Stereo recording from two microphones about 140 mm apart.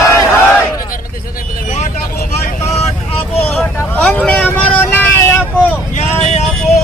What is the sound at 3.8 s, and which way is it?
Vehicle, 10° left (ahead or behind).